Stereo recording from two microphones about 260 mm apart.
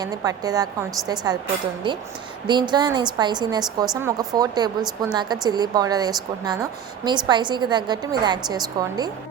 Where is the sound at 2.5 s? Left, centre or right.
Centre.